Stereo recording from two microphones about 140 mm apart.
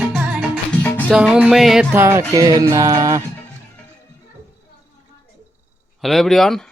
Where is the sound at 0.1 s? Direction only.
5° right (ahead or behind).